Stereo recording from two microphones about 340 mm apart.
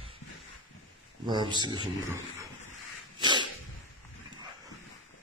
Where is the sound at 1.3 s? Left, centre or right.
Centre.